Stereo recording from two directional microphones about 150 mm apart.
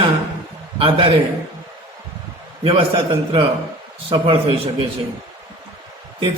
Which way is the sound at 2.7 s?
35° right (ahead or behind).